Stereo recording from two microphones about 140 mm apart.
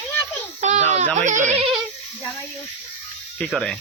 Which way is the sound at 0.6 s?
55° right (ahead or behind).